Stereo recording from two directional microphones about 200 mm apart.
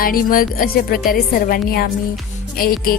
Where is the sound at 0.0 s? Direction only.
45° left (ahead or behind).